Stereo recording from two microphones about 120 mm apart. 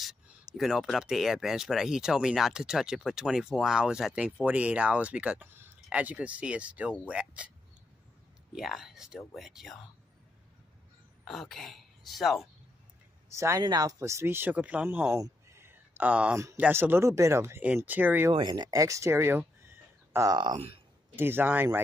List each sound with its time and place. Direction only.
0.0 s speech: centre (ahead or behind)
8.5 s speech: centre (ahead or behind)
11.2 s speech: 5° left (ahead or behind)
13.3 s speech: 25° right (ahead or behind)
15.2 s a sound: 20° right (ahead or behind)
16.5 s speech: 15° right (ahead or behind)
18.3 s speech: 35° right (ahead or behind); by 20.2 s 20° right (ahead or behind)
20.2 s speech: 40° right (ahead or behind)
20.5 s speech: 50° right (ahead or behind)
21.2 s speech: 20° right (ahead or behind)